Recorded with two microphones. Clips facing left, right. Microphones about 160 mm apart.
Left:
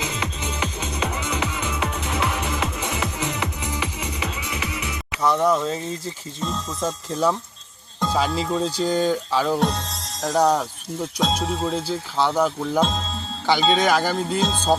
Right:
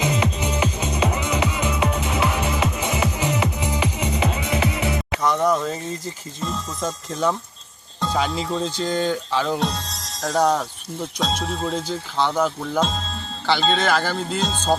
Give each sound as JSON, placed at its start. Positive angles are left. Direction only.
{"t": 0.0, "sound": "music", "side_deg": -15}
{"t": 4.3, "sound": "music", "side_deg": -40}
{"t": 5.2, "sound": "speech", "side_deg": 0}